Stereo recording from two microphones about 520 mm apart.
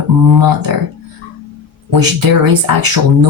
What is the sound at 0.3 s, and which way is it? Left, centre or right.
Speech, right.